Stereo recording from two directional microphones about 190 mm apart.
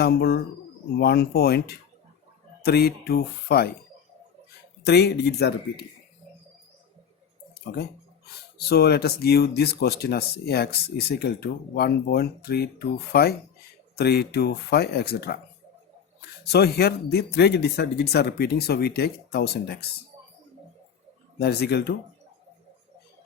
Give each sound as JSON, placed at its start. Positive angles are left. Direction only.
{"t": 0.0, "sound": "speech", "side_deg": 60}
{"t": 4.8, "sound": "speech", "side_deg": 60}
{"t": 7.6, "sound": "speech", "side_deg": 60}
{"t": 16.5, "sound": "speech", "side_deg": 60}
{"t": 21.3, "sound": "speech", "side_deg": 55}